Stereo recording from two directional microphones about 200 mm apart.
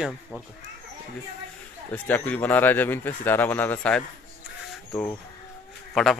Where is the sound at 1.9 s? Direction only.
10° left (ahead or behind).